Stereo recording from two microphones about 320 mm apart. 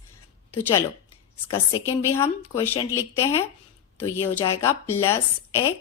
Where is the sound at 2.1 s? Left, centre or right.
Centre.